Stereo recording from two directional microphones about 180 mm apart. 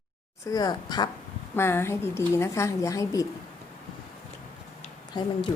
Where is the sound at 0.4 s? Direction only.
20° left (ahead or behind).